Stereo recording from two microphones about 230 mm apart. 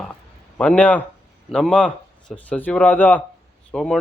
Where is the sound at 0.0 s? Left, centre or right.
Centre.